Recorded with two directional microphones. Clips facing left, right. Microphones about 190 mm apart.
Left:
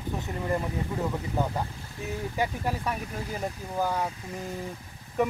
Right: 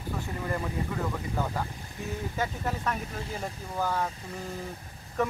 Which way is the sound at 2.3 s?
15° left (ahead or behind).